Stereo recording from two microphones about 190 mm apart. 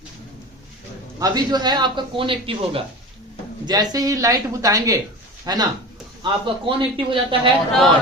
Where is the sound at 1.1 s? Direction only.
20° right (ahead or behind).